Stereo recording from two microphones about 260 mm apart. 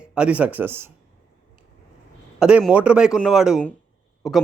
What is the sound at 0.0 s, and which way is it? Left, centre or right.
Speech, centre.